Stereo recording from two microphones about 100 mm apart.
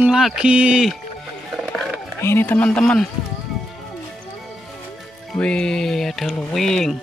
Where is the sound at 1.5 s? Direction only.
Centre (ahead or behind).